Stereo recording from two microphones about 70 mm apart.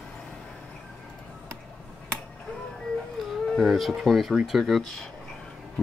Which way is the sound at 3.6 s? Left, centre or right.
Centre.